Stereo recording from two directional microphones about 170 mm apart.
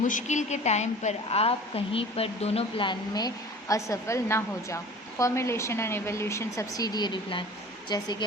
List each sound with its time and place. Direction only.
0.0 s a woman's voice: 45° left (ahead or behind); by 8.1 s 25° left (ahead or behind)